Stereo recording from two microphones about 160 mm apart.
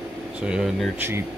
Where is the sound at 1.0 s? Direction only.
15° right (ahead or behind).